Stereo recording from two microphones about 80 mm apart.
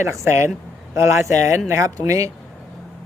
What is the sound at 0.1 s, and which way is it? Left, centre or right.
Speech, right.